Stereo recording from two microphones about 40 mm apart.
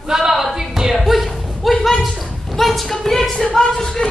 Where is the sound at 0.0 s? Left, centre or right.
Centre.